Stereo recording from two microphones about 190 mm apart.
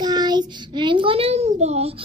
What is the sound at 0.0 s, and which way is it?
Child singing, 20° right (ahead or behind).